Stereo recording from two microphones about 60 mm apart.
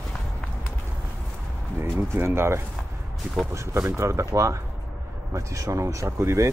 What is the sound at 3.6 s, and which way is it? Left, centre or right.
Speech, right.